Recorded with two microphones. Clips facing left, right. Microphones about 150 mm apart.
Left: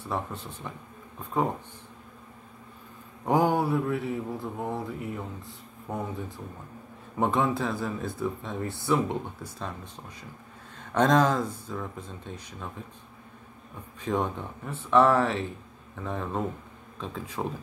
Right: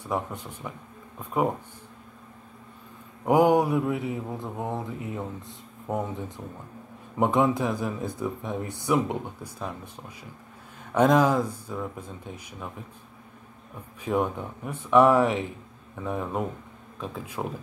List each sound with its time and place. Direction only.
0.1 s speech: 10° right (ahead or behind)
3.3 s speech: 15° right (ahead or behind)
7.2 s speech: 15° right (ahead or behind)
14.0 s speech: 10° right (ahead or behind)